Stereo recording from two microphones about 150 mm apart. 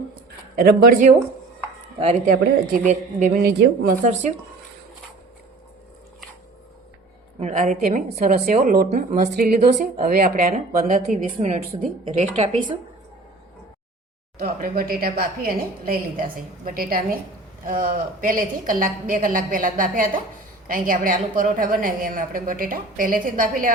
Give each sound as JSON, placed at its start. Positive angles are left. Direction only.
{"t": 0.5, "sound": "a woman's voice", "side_deg": -80}
{"t": 2.2, "sound": "speech", "side_deg": -65}
{"t": 7.3, "sound": "speech", "side_deg": -55}
{"t": 8.9, "sound": "speech", "side_deg": -55}
{"t": 11.4, "sound": "speech", "side_deg": -50}
{"t": 14.3, "sound": "a woman's voice", "side_deg": -80}